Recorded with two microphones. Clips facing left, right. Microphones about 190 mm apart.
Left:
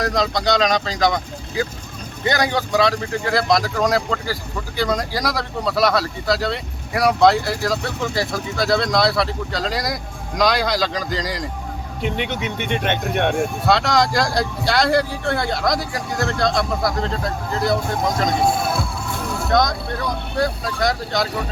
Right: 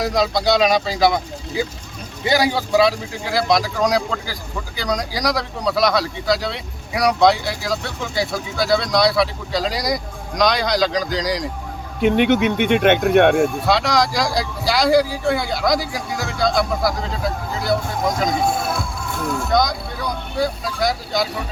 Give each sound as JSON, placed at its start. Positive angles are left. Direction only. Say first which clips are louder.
{"t": 0.0, "sound": "speech", "louder": "right 2 dB", "side_deg": -5}
{"t": 12.0, "sound": "speech", "louder": "right 9 dB", "side_deg": -60}
{"t": 13.7, "sound": "speech", "louder": "even", "side_deg": 0}
{"t": 19.5, "sound": "speech", "louder": "left 2 dB", "side_deg": 0}